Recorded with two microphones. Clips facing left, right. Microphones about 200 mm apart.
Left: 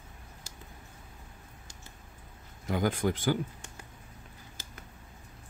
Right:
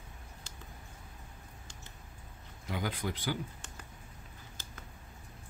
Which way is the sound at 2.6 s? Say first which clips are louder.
Left 8 dB; 50° left (ahead or behind).